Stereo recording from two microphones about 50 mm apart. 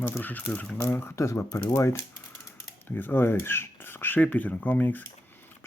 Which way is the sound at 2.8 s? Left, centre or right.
Left.